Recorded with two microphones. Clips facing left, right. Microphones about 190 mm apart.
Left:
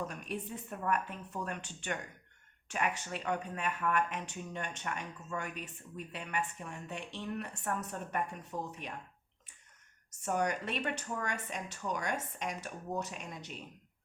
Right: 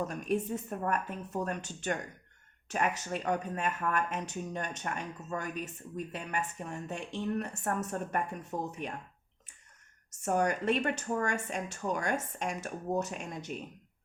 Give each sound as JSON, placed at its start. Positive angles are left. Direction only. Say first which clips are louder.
{"t": 0.0, "sound": "speech", "louder": "right 7 dB", "side_deg": -45}
{"t": 10.2, "sound": "speech", "louder": "right 5 dB", "side_deg": -45}